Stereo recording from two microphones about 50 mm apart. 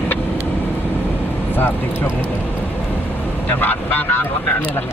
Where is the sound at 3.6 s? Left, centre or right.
Left.